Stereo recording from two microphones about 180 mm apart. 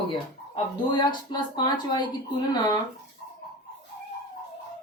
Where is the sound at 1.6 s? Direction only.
25° left (ahead or behind).